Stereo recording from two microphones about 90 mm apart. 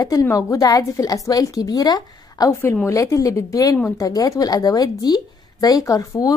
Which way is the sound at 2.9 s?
35° left (ahead or behind).